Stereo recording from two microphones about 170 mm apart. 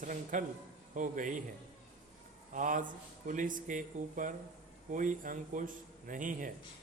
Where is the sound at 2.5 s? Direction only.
50° right (ahead or behind).